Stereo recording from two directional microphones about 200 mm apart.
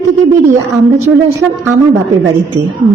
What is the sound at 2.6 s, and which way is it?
Speech, 60° right (ahead or behind).